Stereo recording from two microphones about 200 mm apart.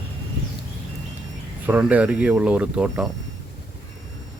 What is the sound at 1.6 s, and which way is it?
Speech, 10° right (ahead or behind).